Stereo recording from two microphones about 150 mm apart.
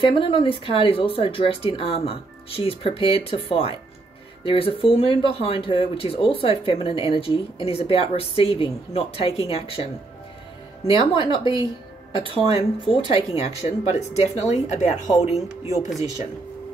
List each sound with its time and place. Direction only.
0.0 s speech: 35° left (ahead or behind)
10.9 s speech: 35° left (ahead or behind); by 15.0 s 50° left (ahead or behind)